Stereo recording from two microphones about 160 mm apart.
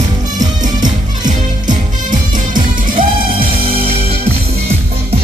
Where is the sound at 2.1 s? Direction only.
55° right (ahead or behind).